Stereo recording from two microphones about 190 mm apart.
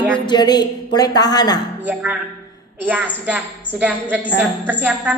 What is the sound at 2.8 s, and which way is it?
A woman's voice, 10° right (ahead or behind).